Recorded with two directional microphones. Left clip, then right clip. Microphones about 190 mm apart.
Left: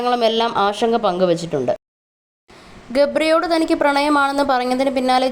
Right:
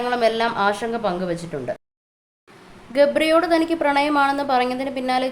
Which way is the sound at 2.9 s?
20° left (ahead or behind).